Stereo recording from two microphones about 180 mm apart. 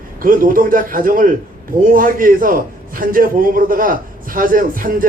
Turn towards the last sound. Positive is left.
turn(degrees=-50)  # may be behind; listen again after turning